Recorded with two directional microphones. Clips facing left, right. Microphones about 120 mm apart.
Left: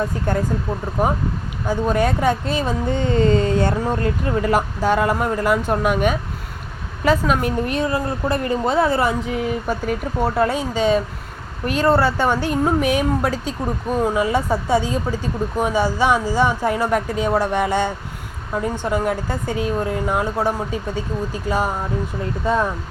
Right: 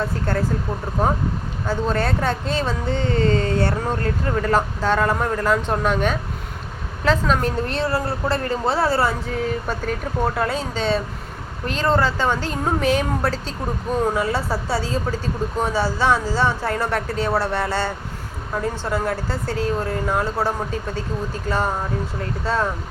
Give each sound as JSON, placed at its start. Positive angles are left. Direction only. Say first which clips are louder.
{"t": 0.0, "sound": "speech", "louder": "left 2 dB", "side_deg": 15}